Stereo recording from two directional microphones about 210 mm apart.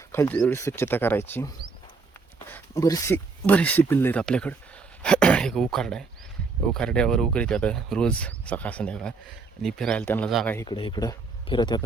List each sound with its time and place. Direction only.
0.1 s speech: 10° left (ahead or behind)
10.7 s speech: 20° left (ahead or behind)